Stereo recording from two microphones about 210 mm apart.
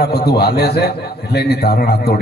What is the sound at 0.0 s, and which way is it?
A man's voice, 50° left (ahead or behind).